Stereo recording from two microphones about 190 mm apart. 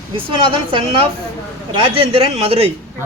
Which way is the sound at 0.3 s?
25° right (ahead or behind).